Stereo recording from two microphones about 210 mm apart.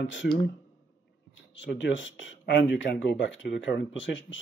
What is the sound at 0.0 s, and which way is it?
Speech, 60° left (ahead or behind).